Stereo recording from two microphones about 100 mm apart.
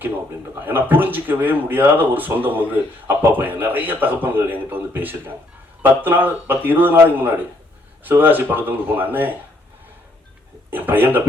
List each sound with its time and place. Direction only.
0.6 s speech: 20° right (ahead or behind)
10.7 s speech: 20° right (ahead or behind)